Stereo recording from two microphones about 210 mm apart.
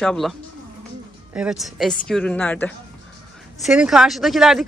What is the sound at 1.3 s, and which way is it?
Speech, 5° right (ahead or behind).